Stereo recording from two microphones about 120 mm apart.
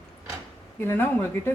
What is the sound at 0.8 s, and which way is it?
Speech, 20° left (ahead or behind).